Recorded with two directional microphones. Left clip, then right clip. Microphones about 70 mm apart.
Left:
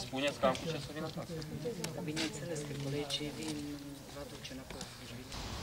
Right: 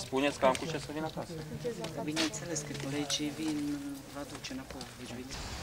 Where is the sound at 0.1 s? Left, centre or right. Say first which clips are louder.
Right 4 dB; right.